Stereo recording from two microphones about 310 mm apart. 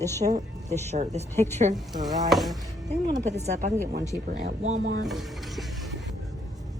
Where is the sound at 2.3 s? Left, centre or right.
Centre.